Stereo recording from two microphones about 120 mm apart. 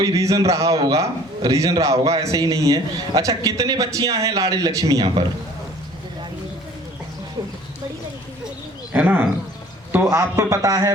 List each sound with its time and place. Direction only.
0.0 s a man's voice: 30° right (ahead or behind)
8.9 s a man's voice: 15° right (ahead or behind)